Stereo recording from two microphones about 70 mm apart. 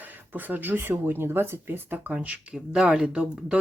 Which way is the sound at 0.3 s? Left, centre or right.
Right.